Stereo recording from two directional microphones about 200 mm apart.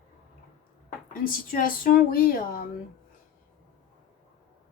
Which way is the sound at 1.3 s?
45° left (ahead or behind).